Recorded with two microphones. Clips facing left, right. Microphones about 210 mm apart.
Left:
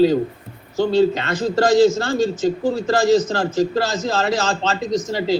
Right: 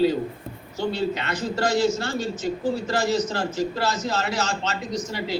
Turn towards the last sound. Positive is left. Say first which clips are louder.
# left 8 dB
turn(degrees=90)